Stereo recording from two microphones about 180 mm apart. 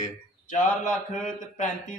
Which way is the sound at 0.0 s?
45° left (ahead or behind).